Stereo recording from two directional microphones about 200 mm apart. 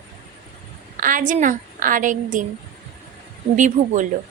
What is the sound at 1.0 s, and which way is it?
A woman's voice, 40° right (ahead or behind).